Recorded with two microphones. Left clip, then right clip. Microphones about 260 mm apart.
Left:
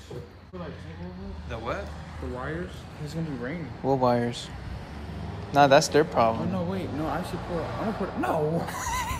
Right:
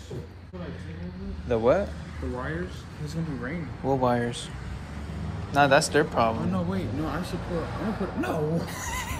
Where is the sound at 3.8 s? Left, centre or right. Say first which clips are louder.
Left 1 dB; left.